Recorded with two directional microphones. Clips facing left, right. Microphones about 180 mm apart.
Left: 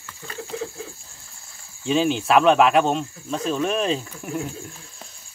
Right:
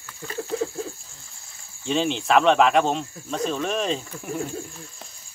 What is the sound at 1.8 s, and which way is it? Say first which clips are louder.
Speech: left 3 dB; 5° left (ahead or behind).